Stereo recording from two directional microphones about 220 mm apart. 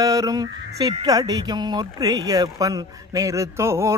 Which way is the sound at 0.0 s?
15° right (ahead or behind).